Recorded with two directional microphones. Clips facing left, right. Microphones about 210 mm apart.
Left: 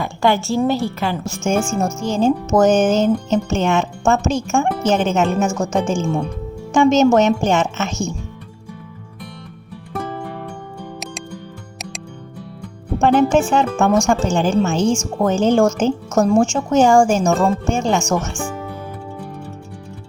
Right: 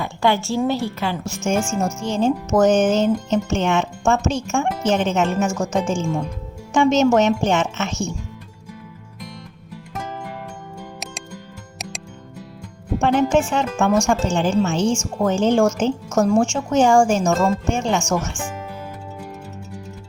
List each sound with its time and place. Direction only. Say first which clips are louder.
0.0 s speech: left 2 dB; 45° left (ahead or behind)
6.7 s speech: left 3 dB; 40° left (ahead or behind)
13.0 s a woman's voice: left 3 dB; 40° left (ahead or behind)